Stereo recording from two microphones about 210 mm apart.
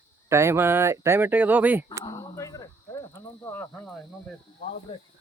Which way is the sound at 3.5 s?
10° left (ahead or behind).